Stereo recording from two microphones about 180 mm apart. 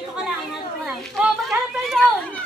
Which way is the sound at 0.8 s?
Centre (ahead or behind).